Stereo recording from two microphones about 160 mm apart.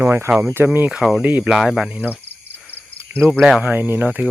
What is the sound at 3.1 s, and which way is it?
Speech, 10° right (ahead or behind).